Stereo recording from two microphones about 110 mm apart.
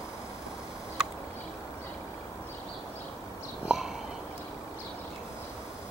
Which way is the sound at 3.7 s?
5° right (ahead or behind).